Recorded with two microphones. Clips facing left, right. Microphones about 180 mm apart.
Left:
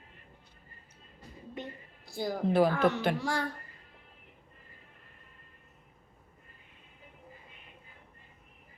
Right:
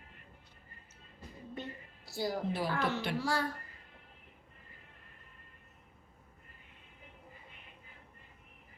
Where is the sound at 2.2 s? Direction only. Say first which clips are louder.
Left 8 dB; 50° left (ahead or behind).